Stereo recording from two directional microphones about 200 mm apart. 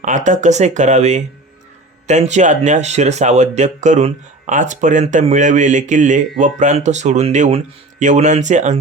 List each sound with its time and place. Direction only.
0.0 s speech: 40° right (ahead or behind)